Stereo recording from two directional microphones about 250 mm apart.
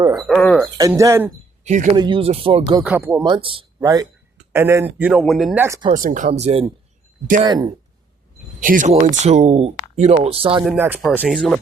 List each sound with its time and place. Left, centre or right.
0.1 s a sound: centre
0.6 s speech: centre
1.6 s speech: right
2.0 s speech: centre
2.8 s speech: centre
5.9 s speech: right; by 7.7 s centre
8.6 s speech: right
10.6 s speech: centre